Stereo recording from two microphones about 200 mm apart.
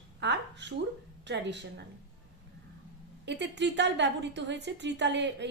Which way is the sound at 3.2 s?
60° right (ahead or behind).